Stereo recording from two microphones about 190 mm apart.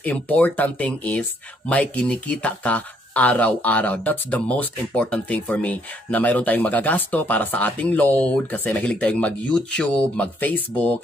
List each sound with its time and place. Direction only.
0.0 s speech: 10° left (ahead or behind)